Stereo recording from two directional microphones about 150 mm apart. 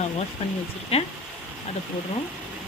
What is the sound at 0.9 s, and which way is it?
Speech, 45° left (ahead or behind).